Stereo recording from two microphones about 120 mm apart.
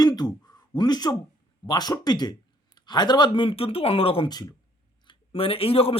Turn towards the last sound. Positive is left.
turn(degrees=50)  # may be behind; listen again after turning